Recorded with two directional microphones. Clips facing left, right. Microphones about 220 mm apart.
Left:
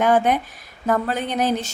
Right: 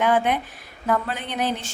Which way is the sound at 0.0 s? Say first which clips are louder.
Left 3 dB; 40° left (ahead or behind).